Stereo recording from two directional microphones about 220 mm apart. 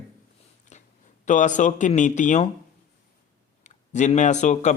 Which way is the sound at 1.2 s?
35° left (ahead or behind).